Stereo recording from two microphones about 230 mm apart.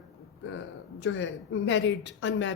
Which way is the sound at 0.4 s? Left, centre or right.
Left.